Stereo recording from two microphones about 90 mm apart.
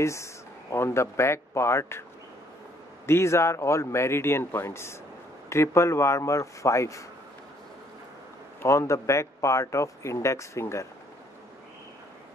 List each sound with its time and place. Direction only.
0.0 s speech: 35° left (ahead or behind)
3.1 s speech: 30° left (ahead or behind)
8.6 s speech: 35° left (ahead or behind)